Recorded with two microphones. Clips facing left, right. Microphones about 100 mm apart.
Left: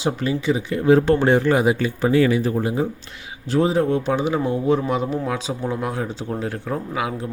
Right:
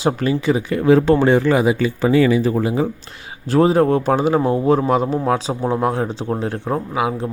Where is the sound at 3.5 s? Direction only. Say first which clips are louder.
Right 5 dB; 55° right (ahead or behind); by 7.3 s 25° right (ahead or behind).